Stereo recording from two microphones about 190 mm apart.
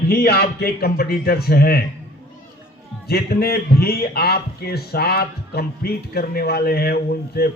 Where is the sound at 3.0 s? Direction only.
55° left (ahead or behind).